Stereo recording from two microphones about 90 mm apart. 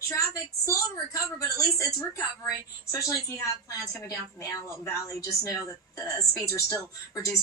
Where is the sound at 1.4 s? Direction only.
35° left (ahead or behind).